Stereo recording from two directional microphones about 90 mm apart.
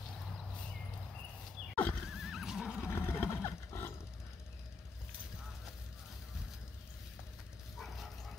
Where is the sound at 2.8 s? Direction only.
25° left (ahead or behind).